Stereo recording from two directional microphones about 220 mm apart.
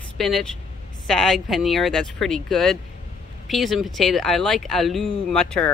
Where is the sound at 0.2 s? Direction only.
Centre (ahead or behind).